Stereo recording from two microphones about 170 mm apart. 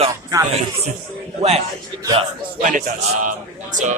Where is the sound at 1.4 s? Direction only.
35° right (ahead or behind).